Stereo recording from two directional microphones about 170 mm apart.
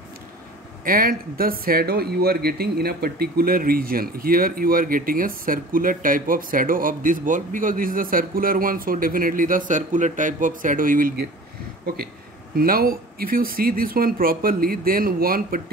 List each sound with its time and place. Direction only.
0.8 s speech: 55° right (ahead or behind)
12.5 s speech: 60° right (ahead or behind)